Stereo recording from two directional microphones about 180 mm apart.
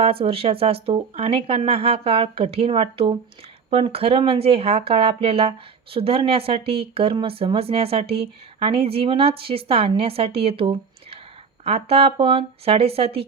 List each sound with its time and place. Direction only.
0.0 s speech: 30° right (ahead or behind)